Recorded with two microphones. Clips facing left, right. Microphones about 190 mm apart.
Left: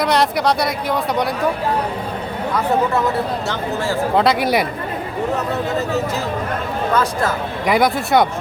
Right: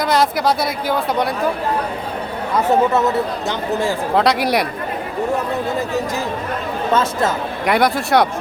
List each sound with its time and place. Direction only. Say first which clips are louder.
0.0 s speech: even; centre (ahead or behind)
3.5 s speech: right 2 dB; 15° right (ahead or behind)
4.1 s speech: even; centre (ahead or behind)
6.9 s speech: right 2 dB; 25° right (ahead or behind)
7.6 s speech: even; centre (ahead or behind)